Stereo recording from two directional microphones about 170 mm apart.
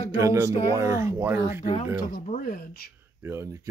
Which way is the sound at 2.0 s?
55° left (ahead or behind).